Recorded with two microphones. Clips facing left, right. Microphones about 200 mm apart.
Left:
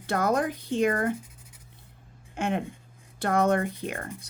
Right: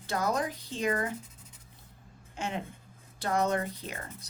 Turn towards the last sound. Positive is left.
turn(degrees=55)  # may be behind; listen again after turning